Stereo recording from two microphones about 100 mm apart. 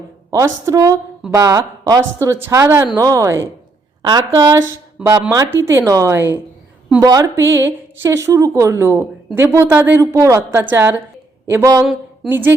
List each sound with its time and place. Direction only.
0.3 s a woman's voice: 30° right (ahead or behind)
5.0 s speech: 15° right (ahead or behind)
5.5 s speech: 25° right (ahead or behind)
7.0 s speech: 35° right (ahead or behind); by 10.0 s 20° right (ahead or behind)
10.0 s speech: 30° right (ahead or behind)